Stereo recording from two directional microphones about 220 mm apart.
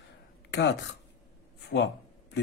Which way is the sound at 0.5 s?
55° left (ahead or behind).